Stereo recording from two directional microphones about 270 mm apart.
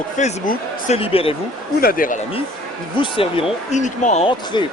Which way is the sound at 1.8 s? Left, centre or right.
Left.